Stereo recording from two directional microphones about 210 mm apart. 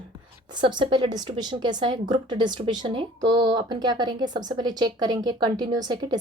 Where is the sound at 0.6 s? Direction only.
20° right (ahead or behind).